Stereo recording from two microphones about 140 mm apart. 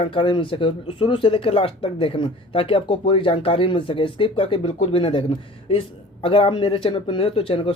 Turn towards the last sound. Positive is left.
turn(degrees=40)  # may be behind; listen again after turning